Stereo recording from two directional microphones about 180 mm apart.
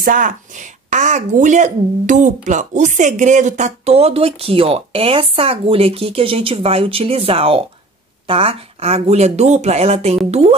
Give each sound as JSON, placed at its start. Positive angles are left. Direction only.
{"t": 0.0, "sound": "speech", "side_deg": -50}